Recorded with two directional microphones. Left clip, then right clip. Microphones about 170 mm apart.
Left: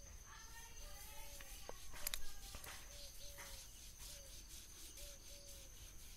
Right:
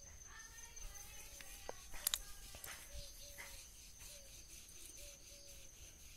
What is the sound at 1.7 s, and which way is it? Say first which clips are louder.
Music: right 5 dB; 20° right (ahead or behind).